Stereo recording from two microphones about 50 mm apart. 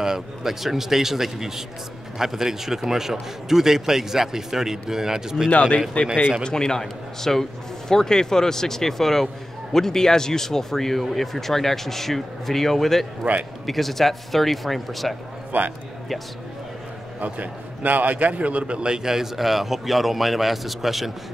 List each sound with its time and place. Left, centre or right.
0.0 s a man's voice: centre
5.5 s a man's voice: left
6.4 s a man's voice: centre
13.2 s a man's voice: right
13.7 s a man's voice: centre
15.5 s a man's voice: right
17.2 s a man's voice: right; by 21.1 s centre